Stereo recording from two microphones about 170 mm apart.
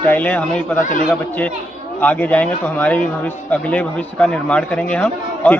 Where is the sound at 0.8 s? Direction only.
50° left (ahead or behind).